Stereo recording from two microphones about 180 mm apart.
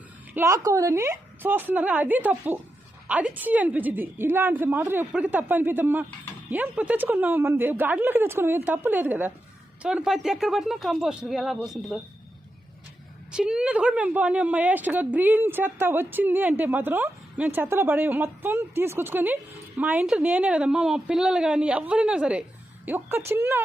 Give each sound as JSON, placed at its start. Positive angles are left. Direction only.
{"t": 0.3, "sound": "a woman's voice", "side_deg": -15}
{"t": 13.3, "sound": "a woman's voice", "side_deg": -5}